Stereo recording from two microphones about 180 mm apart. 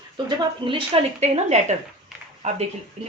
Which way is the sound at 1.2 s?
40° right (ahead or behind).